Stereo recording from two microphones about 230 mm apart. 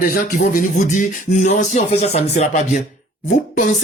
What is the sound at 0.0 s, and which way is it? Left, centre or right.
Speech, left.